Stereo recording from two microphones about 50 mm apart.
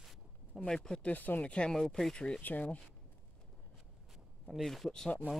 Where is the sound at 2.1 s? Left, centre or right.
Centre.